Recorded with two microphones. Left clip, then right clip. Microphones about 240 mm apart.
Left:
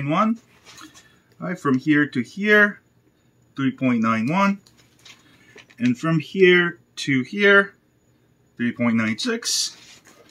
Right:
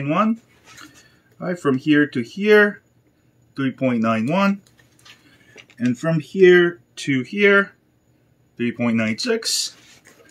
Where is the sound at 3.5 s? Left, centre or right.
Centre.